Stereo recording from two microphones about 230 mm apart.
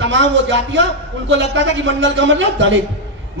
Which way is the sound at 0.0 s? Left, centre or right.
Right.